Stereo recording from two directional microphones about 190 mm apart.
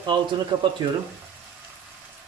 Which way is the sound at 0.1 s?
25° right (ahead or behind).